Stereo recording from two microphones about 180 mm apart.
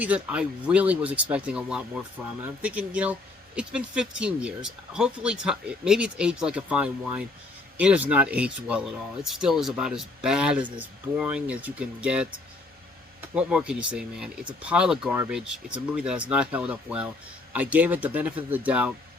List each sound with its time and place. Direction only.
0.0 s speech: 10° right (ahead or behind)